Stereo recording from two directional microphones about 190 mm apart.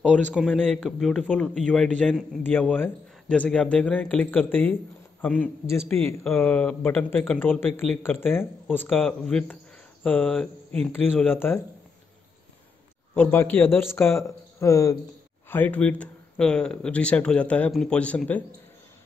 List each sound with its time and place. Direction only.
0.1 s a man's voice: 5° left (ahead or behind)
13.1 s speech: 10° left (ahead or behind)